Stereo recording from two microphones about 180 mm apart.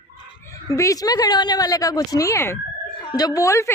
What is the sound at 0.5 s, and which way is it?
A woman's voice, 20° left (ahead or behind).